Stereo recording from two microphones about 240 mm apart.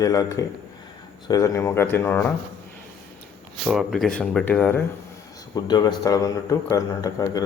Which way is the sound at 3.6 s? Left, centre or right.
Centre.